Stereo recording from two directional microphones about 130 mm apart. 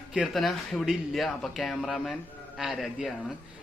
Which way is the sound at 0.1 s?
5° right (ahead or behind).